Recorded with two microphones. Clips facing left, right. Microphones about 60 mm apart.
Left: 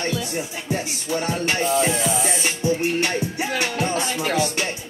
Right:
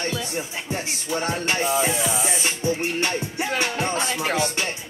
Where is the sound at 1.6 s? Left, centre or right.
Centre.